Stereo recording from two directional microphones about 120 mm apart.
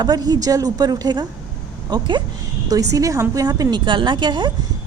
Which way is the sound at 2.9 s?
30° right (ahead or behind).